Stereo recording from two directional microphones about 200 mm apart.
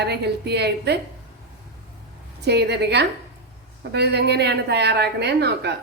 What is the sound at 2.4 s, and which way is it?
A woman's voice, 55° right (ahead or behind).